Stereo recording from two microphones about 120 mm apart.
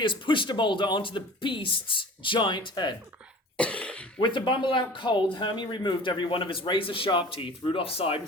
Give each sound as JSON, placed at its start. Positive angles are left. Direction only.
{"t": 0.0, "sound": "speech", "side_deg": 45}
{"t": 3.6, "sound": "cough", "side_deg": 10}
{"t": 4.2, "sound": "speech", "side_deg": 40}